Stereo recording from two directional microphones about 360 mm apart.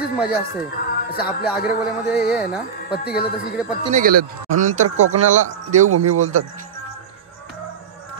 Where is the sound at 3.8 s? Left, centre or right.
Right.